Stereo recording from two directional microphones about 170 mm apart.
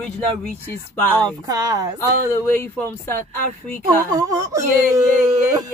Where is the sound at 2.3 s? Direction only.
15° left (ahead or behind).